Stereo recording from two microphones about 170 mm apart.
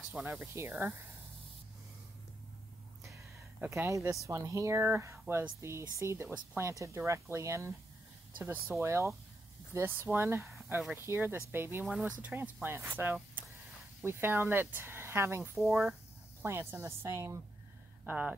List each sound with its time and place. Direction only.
0.1 s speech: 10° right (ahead or behind)
3.6 s speech: 15° right (ahead or behind)
8.8 s speech: 15° right (ahead or behind)